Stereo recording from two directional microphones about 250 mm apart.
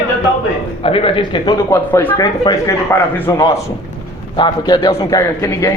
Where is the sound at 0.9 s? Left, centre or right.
Left.